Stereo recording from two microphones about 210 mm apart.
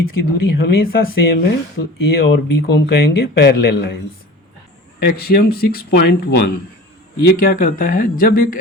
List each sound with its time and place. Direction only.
0.0 s speech: 50° left (ahead or behind)
4.9 s speech: 45° left (ahead or behind)